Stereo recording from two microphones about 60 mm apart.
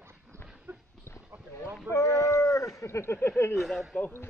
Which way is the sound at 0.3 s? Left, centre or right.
Right.